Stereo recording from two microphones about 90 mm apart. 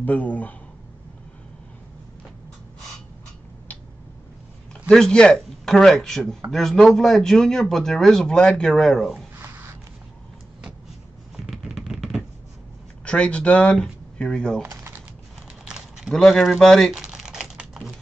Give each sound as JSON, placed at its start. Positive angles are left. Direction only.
{"t": 0.0, "sound": "speech", "side_deg": 15}
{"t": 4.8, "sound": "speech", "side_deg": 10}
{"t": 11.3, "sound": "a sound", "side_deg": -5}
{"t": 13.0, "sound": "speech", "side_deg": 15}
{"t": 14.7, "sound": "typing", "side_deg": -25}
{"t": 15.6, "sound": "a sound", "side_deg": -10}
{"t": 16.1, "sound": "speech", "side_deg": 5}
{"t": 16.9, "sound": "typing", "side_deg": -5}